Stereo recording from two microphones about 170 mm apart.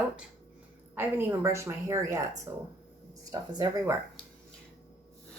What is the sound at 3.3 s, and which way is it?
Speech, 20° right (ahead or behind).